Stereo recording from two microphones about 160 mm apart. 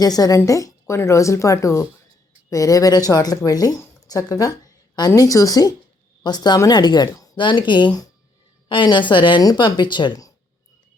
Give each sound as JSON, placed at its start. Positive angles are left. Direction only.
{"t": 0.0, "sound": "speech", "side_deg": 25}